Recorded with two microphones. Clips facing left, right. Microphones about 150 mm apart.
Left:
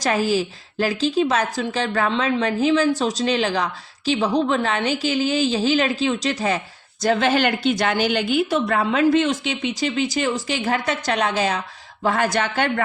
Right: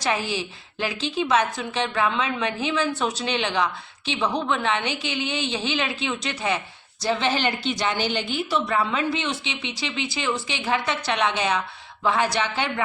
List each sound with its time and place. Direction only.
0.0 s a woman's voice: 40° left (ahead or behind); by 7.9 s 55° left (ahead or behind)
7.9 s a woman's voice: 10° left (ahead or behind)
8.4 s speech: 50° left (ahead or behind)